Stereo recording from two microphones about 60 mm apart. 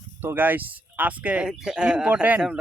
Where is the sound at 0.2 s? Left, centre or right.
Right.